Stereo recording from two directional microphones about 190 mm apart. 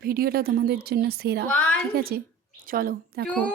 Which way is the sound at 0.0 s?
50° right (ahead or behind).